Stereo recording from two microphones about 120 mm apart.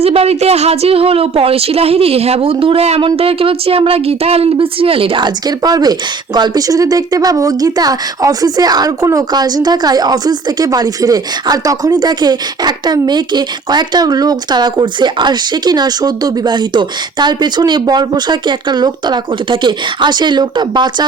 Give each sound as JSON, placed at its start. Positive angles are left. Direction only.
{"t": 0.0, "sound": "a woman's voice", "side_deg": -55}